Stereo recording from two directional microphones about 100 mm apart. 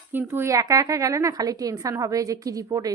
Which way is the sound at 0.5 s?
35° right (ahead or behind).